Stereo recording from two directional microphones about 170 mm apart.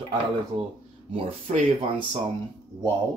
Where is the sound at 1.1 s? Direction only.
30° right (ahead or behind).